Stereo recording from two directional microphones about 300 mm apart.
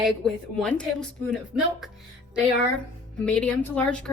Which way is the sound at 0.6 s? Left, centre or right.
Centre.